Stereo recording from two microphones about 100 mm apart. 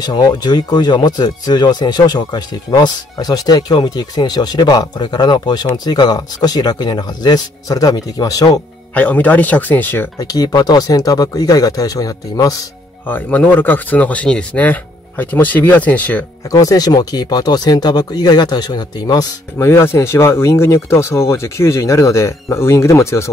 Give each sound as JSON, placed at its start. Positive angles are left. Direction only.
{"t": 0.0, "sound": "speech", "side_deg": 40}
{"t": 8.9, "sound": "speech", "side_deg": 15}
{"t": 10.1, "sound": "speech", "side_deg": 40}
{"t": 13.0, "sound": "speech", "side_deg": 20}
{"t": 16.4, "sound": "speech", "side_deg": 35}
{"t": 19.6, "sound": "speech", "side_deg": 25}